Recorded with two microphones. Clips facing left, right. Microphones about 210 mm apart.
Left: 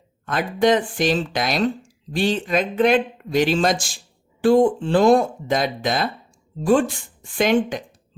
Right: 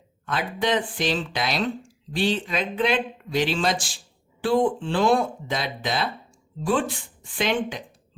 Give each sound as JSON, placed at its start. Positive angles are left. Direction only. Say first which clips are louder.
{"t": 0.3, "sound": "speech", "louder": "left 7 dB", "side_deg": 45}